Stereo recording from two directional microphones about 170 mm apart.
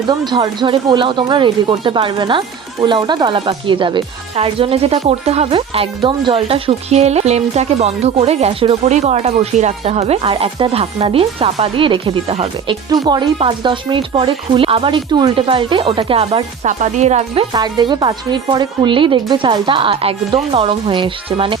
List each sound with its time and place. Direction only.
0.1 s speech: 25° right (ahead or behind)
16.6 s speech: 45° right (ahead or behind)
17.5 s speech: 25° right (ahead or behind)